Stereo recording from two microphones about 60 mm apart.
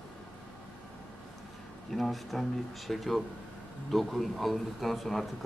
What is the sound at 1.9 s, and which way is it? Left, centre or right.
A man's voice, centre.